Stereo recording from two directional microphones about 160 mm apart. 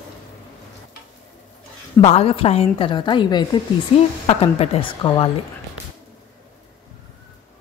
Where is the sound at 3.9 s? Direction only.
40° left (ahead or behind).